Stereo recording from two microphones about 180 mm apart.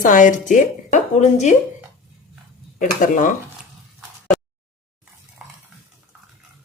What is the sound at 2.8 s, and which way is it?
Speech, 50° left (ahead or behind).